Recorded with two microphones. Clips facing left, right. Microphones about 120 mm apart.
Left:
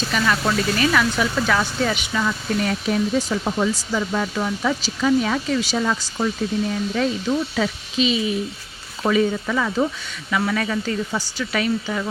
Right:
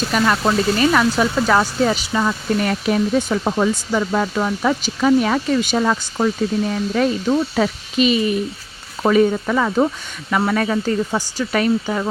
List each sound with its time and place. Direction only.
0.1 s speech: 40° right (ahead or behind)
2.6 s speech: 60° right (ahead or behind)